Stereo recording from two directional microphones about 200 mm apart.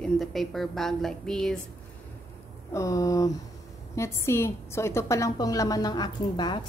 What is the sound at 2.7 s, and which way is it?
A woman's voice, 15° left (ahead or behind).